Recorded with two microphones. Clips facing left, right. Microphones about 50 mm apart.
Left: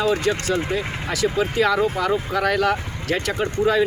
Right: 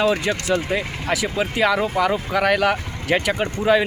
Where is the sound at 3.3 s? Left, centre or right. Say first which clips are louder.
Right 1 dB; right.